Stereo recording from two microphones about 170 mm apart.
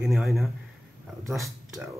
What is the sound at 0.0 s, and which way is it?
Speech, centre (ahead or behind).